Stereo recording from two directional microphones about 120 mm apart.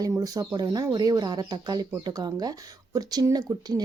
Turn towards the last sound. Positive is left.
turn(degrees=-30)  # may be behind; listen again after turning